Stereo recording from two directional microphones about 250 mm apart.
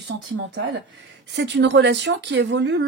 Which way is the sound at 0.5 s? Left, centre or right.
Right.